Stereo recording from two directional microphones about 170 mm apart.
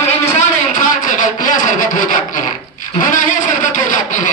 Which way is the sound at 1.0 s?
50° left (ahead or behind).